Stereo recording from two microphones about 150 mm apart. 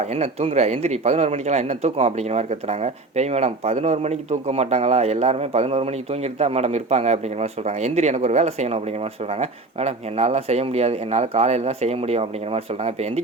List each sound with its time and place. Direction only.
0.0 s speech: 45° right (ahead or behind)